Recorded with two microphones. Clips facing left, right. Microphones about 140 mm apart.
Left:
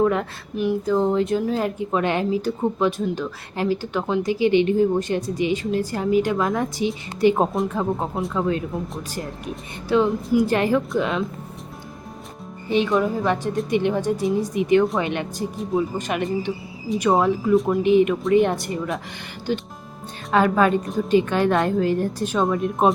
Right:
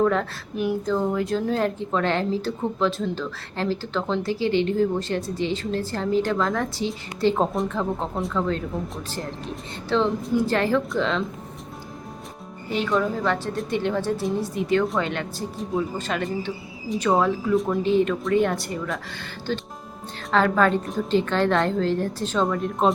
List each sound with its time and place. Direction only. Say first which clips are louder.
0.0 s speech: left 1 dB; 15° left (ahead or behind)
0.5 s a sound: left 2 dB; centre (ahead or behind)
0.9 s speech: left 6 dB; 20° left (ahead or behind)
1.4 s speech: left 1 dB; 5° left (ahead or behind)
9.9 s speech: left 3 dB; 10° left (ahead or behind)
12.6 s speech: left 3 dB; 20° left (ahead or behind)
17.5 s a sound: left 5 dB; centre (ahead or behind)
17.8 s speech: left 4 dB; 15° left (ahead or behind)